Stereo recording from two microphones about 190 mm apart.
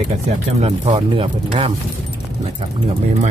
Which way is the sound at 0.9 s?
30° right (ahead or behind).